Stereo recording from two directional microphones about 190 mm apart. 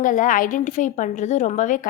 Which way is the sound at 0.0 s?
45° left (ahead or behind).